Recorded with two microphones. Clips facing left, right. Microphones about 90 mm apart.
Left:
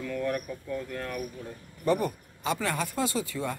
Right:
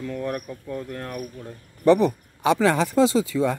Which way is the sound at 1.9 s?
90° right.